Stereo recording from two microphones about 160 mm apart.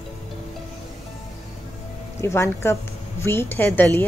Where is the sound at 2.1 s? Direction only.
15° left (ahead or behind).